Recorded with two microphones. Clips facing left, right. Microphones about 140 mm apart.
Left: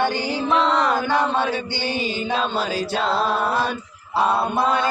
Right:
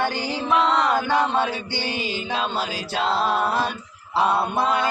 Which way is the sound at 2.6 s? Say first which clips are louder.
Left 3 dB; 45° left (ahead or behind).